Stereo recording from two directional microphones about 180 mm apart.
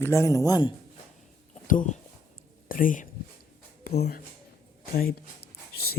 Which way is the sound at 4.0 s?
60° left (ahead or behind).